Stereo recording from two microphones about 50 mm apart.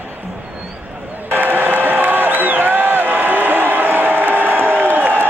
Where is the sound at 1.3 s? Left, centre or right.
Right.